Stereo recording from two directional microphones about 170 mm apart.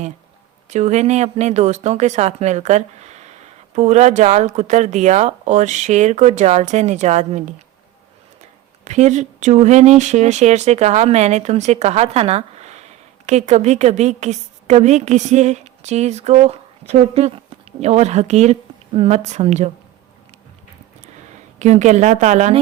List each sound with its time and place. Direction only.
0.7 s speech: 45° right (ahead or behind)
8.8 s speech: 45° right (ahead or behind)
21.3 s a woman's voice: 45° right (ahead or behind)